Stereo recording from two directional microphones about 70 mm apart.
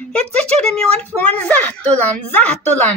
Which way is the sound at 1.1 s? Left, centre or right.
Left.